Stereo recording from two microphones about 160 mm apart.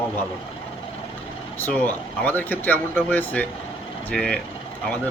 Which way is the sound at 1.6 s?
10° left (ahead or behind).